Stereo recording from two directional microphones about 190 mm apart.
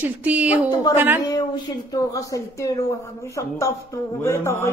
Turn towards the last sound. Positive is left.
turn(degrees=15)  # may be behind; listen again after turning